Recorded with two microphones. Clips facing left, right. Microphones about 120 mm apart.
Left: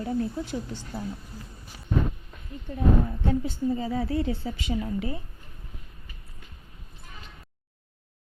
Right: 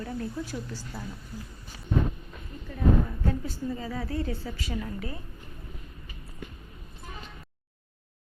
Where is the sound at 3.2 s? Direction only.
25° left (ahead or behind).